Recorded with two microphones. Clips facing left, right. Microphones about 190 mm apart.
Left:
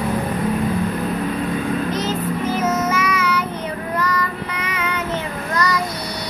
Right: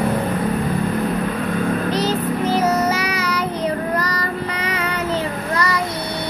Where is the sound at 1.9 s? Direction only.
35° right (ahead or behind).